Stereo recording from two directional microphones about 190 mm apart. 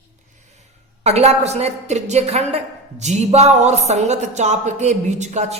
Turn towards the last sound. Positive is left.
turn(degrees=-35)  # may be behind; listen again after turning